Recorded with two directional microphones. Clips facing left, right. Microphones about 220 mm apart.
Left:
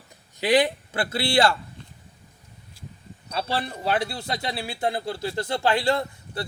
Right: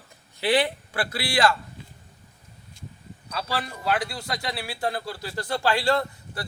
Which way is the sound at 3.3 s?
25° left (ahead or behind).